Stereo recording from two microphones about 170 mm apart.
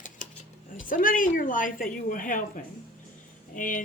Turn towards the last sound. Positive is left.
turn(degrees=50)  # may be behind; listen again after turning